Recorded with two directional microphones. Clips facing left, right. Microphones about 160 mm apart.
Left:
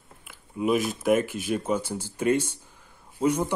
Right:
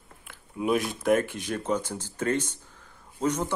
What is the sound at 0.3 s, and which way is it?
Speech, centre (ahead or behind).